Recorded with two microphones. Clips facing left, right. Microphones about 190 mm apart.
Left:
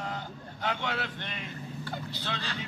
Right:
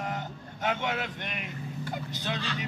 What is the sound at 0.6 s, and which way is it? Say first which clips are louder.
A man's voice: right 2 dB; 20° right (ahead or behind).